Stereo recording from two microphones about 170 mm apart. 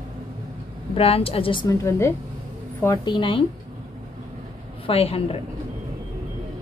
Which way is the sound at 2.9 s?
25° left (ahead or behind).